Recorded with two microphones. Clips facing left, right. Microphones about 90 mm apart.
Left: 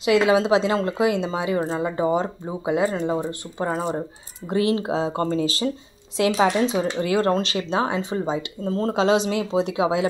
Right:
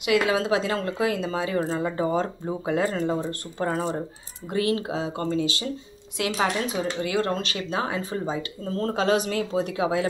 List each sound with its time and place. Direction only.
0.0 s speech: 25° left (ahead or behind)
4.5 s speech: 25° left (ahead or behind)